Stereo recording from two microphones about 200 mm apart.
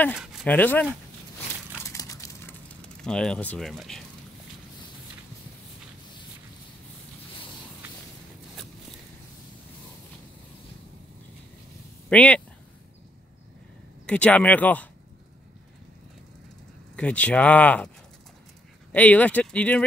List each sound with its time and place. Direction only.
0.1 s speech: 5° right (ahead or behind)
0.5 s speech: 10° left (ahead or behind)
1.9 s dog: 15° left (ahead or behind)
2.8 s speech: 5° left (ahead or behind)
12.1 s speech: 5° left (ahead or behind)
14.0 s speech: 5° left (ahead or behind)
16.9 s speech: 5° left (ahead or behind)